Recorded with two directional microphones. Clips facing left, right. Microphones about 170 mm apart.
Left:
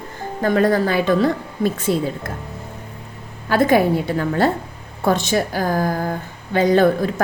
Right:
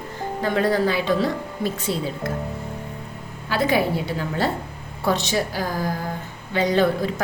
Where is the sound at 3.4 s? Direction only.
50° left (ahead or behind).